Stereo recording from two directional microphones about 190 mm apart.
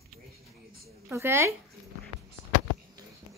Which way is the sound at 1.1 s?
10° right (ahead or behind).